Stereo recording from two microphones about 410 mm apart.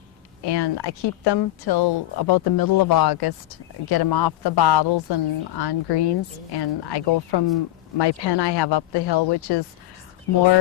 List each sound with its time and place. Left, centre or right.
0.4 s speech: left